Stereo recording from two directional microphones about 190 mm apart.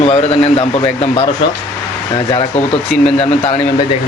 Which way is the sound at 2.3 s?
30° left (ahead or behind).